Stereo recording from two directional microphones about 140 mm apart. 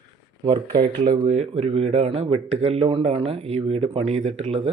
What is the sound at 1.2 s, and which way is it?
Speech, 55° right (ahead or behind).